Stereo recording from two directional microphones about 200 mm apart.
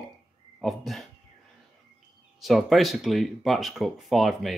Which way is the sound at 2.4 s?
Centre (ahead or behind).